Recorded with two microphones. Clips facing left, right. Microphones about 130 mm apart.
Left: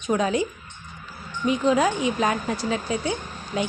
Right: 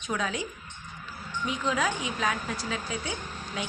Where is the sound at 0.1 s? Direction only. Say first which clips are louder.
Left 9 dB; 45° left (ahead or behind).